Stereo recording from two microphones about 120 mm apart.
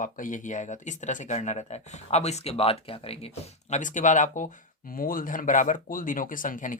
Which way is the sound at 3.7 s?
90° left.